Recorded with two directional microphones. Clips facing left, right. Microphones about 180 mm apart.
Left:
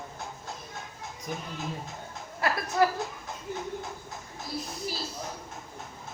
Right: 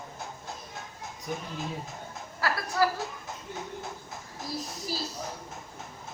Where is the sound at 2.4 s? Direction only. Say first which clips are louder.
Left 2 dB; 20° left (ahead or behind).